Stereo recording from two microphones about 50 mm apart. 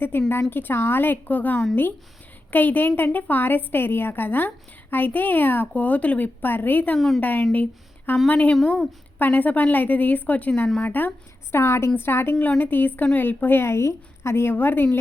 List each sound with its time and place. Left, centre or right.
0.0 s a woman's voice: left
5.7 s speech: left
6.2 s a woman's voice: left
11.5 s a woman's voice: left
11.9 s a woman's voice: left
12.4 s a woman's voice: left
14.5 s a woman's voice: left